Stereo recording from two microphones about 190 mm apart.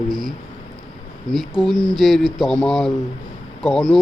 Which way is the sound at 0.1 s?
20° right (ahead or behind).